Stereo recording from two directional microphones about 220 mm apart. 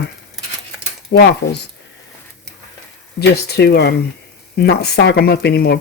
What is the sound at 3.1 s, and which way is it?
Speech, 45° left (ahead or behind).